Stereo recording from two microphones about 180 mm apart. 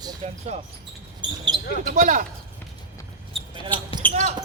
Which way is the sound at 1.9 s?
45° right (ahead or behind).